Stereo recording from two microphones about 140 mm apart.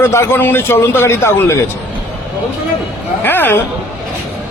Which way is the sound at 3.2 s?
15° left (ahead or behind).